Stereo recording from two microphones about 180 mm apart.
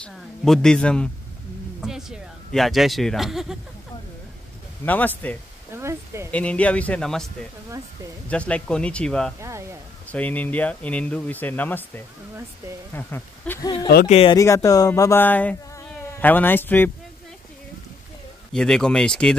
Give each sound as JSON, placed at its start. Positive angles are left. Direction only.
{"t": 0.0, "sound": "a man's voice", "side_deg": 5}
{"t": 4.8, "sound": "speech", "side_deg": 10}
{"t": 5.8, "sound": "speech", "side_deg": -15}
{"t": 6.3, "sound": "speech", "side_deg": 5}
{"t": 8.3, "sound": "a man's voice", "side_deg": 5}
{"t": 9.4, "sound": "speech", "side_deg": -15}
{"t": 10.0, "sound": "speech", "side_deg": 10}
{"t": 14.0, "sound": "speech", "side_deg": 35}
{"t": 14.3, "sound": "speech", "side_deg": 15}
{"t": 18.5, "sound": "a man's voice", "side_deg": 5}